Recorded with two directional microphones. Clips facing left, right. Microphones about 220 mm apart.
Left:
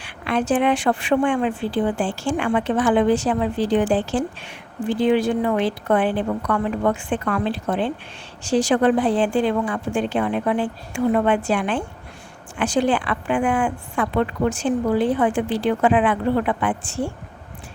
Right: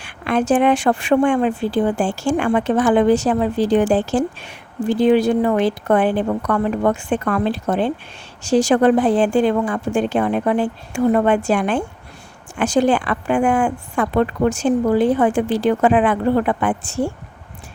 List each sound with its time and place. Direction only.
0.0 s a woman's voice: 45° right (ahead or behind)